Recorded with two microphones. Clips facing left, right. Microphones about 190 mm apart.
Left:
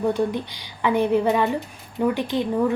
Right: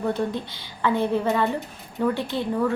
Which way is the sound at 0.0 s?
15° left (ahead or behind).